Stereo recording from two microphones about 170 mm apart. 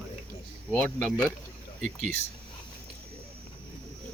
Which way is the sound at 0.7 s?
10° left (ahead or behind).